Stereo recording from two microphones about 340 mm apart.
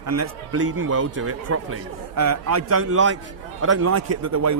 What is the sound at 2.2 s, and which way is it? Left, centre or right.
A man's voice, right.